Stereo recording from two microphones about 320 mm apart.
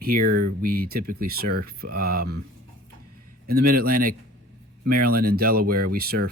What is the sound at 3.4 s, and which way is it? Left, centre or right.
Speech, right.